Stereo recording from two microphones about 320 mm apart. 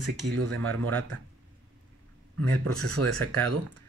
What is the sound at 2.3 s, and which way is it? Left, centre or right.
Speech, right.